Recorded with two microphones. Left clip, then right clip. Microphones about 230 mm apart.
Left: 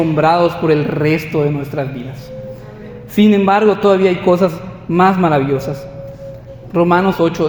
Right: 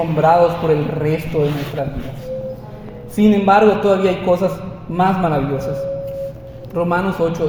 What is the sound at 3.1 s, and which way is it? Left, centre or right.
A man's voice, left.